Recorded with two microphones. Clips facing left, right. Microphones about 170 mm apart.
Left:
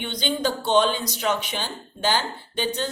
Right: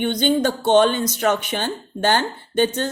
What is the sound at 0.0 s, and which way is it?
A woman's voice, 50° right (ahead or behind).